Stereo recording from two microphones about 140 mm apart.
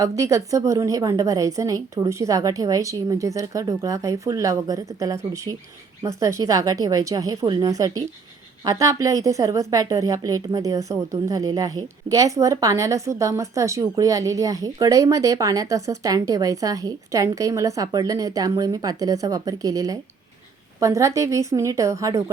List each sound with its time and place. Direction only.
0.0 s a woman's voice: 25° right (ahead or behind)